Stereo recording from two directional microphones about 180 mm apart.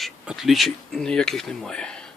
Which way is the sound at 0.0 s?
Centre (ahead or behind).